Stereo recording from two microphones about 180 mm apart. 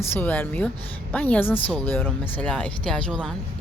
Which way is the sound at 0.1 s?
10° left (ahead or behind).